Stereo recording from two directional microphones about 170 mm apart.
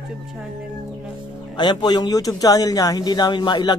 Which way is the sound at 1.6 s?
25° left (ahead or behind).